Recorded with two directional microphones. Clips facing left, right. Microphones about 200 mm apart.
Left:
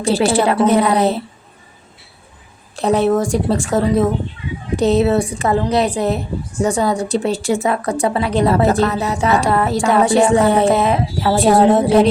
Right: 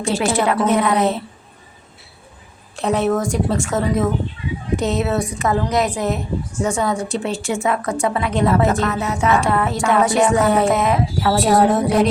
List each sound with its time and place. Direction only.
0.0 s a woman's voice: 35° left (ahead or behind)
2.7 s a woman's voice: 35° left (ahead or behind)